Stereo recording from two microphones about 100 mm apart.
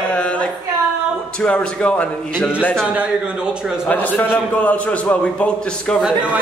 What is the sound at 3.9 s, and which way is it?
A man's voice, 15° left (ahead or behind).